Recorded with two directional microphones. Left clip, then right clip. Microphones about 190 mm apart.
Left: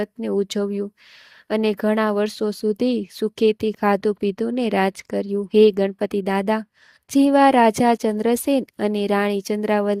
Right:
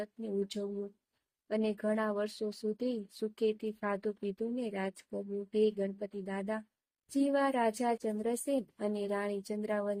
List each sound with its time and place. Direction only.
0.0 s speech: 50° left (ahead or behind)